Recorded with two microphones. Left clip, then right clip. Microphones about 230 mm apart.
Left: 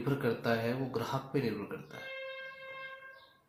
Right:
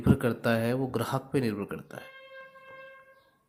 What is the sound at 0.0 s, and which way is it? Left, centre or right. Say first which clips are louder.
Speech: right 5 dB; right.